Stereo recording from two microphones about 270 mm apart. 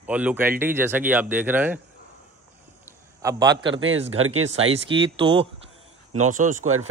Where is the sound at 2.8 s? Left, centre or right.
Centre.